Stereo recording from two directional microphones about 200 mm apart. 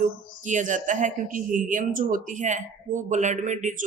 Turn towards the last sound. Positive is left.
turn(degrees=-40)  # may be behind; listen again after turning